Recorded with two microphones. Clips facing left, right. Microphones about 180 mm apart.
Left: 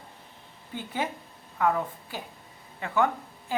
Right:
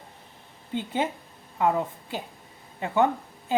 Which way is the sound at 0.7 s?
20° right (ahead or behind).